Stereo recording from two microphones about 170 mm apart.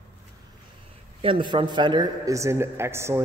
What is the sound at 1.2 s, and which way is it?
A man's voice, 30° right (ahead or behind).